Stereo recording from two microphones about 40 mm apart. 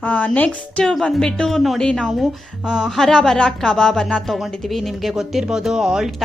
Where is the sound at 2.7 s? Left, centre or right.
Centre.